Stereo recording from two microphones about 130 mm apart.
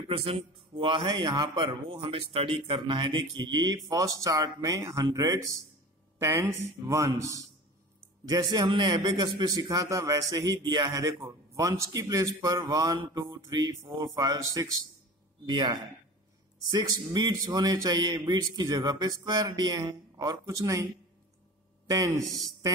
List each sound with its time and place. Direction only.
0.1 s a man's voice: 45° right (ahead or behind)
17.1 s a man's voice: 35° right (ahead or behind)